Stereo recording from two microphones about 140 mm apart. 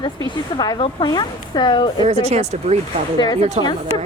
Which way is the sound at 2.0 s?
50° right (ahead or behind).